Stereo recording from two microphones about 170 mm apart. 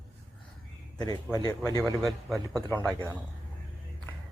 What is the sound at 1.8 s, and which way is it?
Speech, centre (ahead or behind).